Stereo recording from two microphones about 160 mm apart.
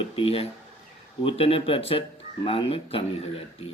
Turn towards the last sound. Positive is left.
turn(degrees=35)  # may be behind; listen again after turning